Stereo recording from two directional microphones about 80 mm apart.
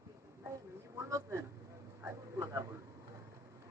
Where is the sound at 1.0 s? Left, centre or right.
Right.